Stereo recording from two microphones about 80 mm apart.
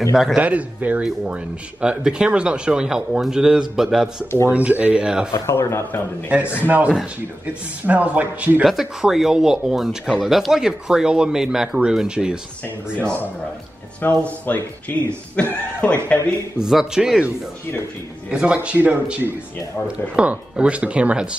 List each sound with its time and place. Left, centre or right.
0.1 s speech: centre
0.4 s speech: centre
4.5 s speech: centre
5.3 s a man's voice: left
6.6 s a man's voice: centre
8.6 s speech: centre
14.0 s a man's voice: left
16.5 s speech: centre
18.3 s speech: centre
20.2 s speech: centre